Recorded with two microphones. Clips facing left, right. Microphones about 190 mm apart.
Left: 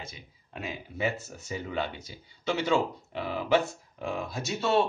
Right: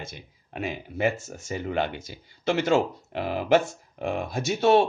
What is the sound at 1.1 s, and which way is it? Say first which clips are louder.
Speech: right 3 dB; 45° right (ahead or behind).